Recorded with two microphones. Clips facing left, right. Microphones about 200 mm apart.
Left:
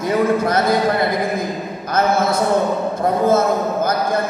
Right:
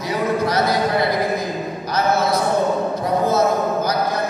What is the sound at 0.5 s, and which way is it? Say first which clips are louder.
Speech: left 2 dB; 50° left (ahead or behind).